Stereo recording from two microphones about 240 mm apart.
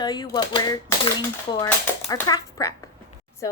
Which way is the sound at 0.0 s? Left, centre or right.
Centre.